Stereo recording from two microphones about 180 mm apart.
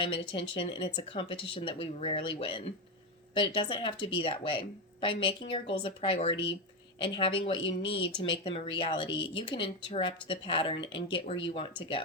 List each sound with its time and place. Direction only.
0.0 s speech: 30° left (ahead or behind)